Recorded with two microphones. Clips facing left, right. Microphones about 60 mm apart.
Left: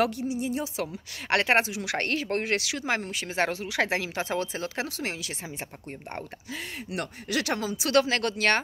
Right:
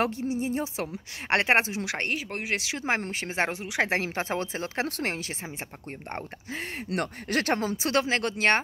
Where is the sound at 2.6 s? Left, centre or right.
Right.